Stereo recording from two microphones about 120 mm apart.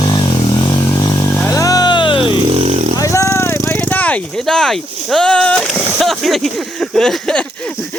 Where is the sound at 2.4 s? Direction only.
60° right (ahead or behind).